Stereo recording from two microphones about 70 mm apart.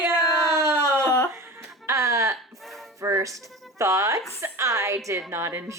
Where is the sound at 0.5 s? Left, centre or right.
Right.